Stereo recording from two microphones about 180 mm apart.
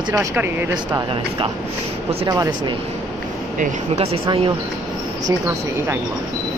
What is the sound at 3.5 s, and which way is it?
Speech, 35° right (ahead or behind).